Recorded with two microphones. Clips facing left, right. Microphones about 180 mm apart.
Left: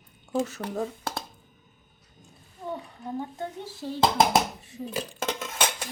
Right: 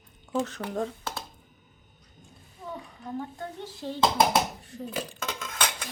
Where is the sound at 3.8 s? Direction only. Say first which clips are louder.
Left 1 dB; 5° left (ahead or behind).